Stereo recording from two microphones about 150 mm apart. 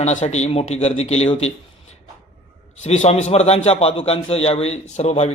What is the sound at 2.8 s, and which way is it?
A man's voice, 50° left (ahead or behind).